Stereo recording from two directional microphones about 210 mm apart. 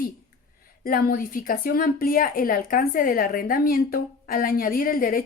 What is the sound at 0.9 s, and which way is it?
Speech, 45° left (ahead or behind).